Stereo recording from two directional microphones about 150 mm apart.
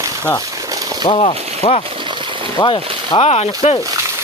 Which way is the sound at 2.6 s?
30° left (ahead or behind).